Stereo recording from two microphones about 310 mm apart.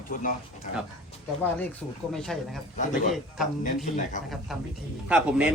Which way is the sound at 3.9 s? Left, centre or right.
Left.